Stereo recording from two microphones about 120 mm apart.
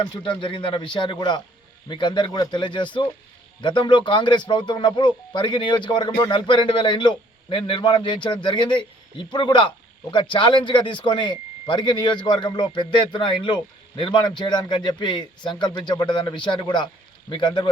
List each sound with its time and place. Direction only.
0.0 s a man's voice: 40° left (ahead or behind)